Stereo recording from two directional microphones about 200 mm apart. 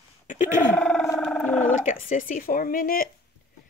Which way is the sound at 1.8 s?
40° left (ahead or behind).